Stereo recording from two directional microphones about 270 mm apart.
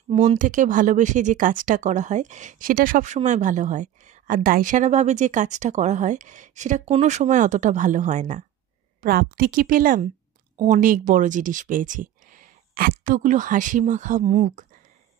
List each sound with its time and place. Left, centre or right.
0.1 s speech: right